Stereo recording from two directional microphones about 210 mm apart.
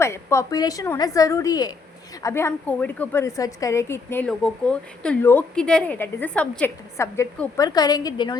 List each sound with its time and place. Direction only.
0.0 s a woman's voice: 15° left (ahead or behind)